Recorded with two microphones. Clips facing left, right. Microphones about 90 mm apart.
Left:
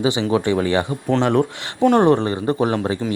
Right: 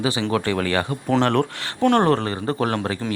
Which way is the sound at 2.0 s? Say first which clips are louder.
Left 4 dB; 20° left (ahead or behind).